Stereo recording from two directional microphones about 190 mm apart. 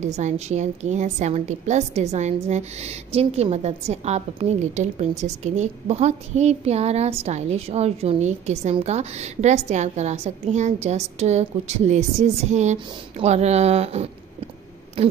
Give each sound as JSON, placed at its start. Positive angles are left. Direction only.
{"t": 0.0, "sound": "a woman's voice", "side_deg": -35}
{"t": 15.0, "sound": "owl", "side_deg": -30}